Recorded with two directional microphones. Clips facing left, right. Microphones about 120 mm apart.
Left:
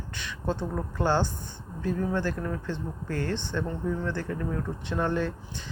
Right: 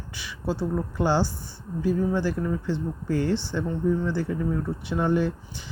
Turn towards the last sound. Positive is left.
turn(degrees=-10)  # may be behind; listen again after turning